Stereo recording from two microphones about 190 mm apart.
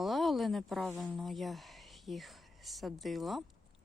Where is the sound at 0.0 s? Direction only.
Centre (ahead or behind).